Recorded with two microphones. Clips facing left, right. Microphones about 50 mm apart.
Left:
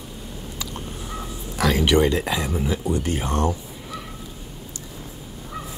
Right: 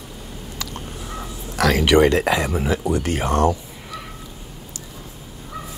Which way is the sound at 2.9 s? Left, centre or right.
Right.